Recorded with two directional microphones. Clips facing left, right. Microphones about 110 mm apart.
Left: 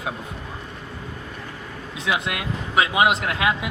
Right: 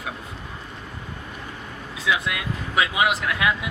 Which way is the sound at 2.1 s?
25° left (ahead or behind).